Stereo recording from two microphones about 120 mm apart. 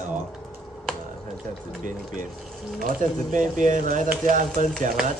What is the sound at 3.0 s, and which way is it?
Speech, 90° right.